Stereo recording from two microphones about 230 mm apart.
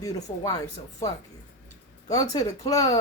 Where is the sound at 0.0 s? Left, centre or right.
Centre.